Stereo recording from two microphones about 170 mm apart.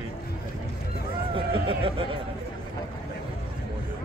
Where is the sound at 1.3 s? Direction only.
30° right (ahead or behind).